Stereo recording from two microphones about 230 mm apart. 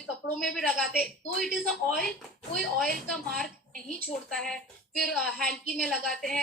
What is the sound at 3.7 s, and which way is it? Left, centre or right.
Speech, right.